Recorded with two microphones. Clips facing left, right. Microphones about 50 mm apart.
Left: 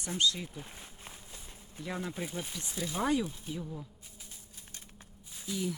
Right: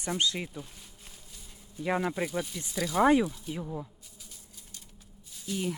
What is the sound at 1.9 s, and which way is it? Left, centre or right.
Speech, right.